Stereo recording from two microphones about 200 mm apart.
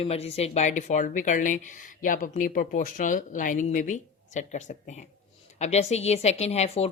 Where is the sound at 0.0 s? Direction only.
30° left (ahead or behind).